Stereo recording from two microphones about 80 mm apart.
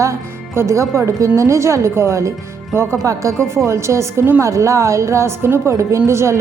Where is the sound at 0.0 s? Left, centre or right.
Right.